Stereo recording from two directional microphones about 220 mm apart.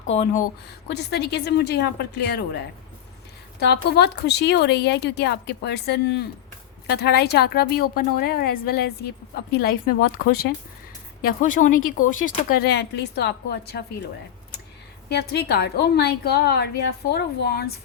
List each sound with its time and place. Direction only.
0.9 s speech: 50° left (ahead or behind)
3.6 s speech: 50° left (ahead or behind)
11.2 s speech: 40° left (ahead or behind)
15.1 s speech: 50° left (ahead or behind)